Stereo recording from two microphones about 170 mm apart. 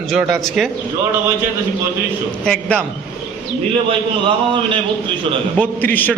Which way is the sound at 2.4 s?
5° left (ahead or behind).